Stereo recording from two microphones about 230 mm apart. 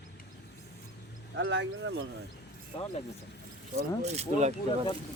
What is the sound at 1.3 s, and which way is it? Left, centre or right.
Speech, right.